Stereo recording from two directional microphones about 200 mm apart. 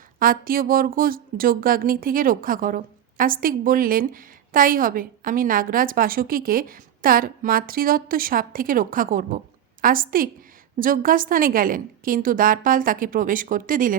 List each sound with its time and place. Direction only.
0.2 s speech: 45° right (ahead or behind)